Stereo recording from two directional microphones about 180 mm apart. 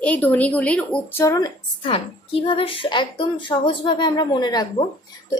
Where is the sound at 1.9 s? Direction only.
30° left (ahead or behind).